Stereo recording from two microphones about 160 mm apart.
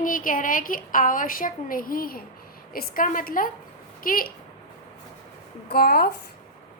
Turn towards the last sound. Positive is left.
turn(degrees=75)  # may be behind; listen again after turning